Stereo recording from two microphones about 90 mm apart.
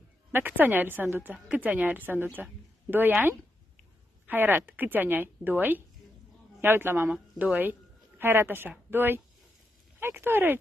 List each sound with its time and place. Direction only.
0.3 s a woman's voice: 20° right (ahead or behind)
7.1 s a woman's voice: 15° right (ahead or behind)